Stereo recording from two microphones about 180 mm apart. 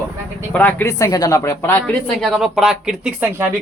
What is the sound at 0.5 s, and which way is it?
Speech, 10° left (ahead or behind).